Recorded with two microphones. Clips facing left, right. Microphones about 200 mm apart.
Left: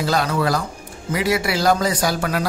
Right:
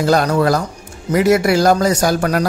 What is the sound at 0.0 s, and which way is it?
A man's voice, 45° right (ahead or behind).